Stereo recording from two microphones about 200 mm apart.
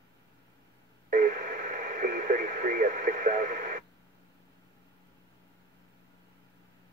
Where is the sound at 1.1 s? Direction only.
40° right (ahead or behind).